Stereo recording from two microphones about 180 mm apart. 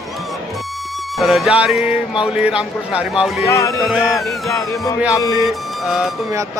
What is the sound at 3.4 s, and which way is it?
Music, 15° left (ahead or behind).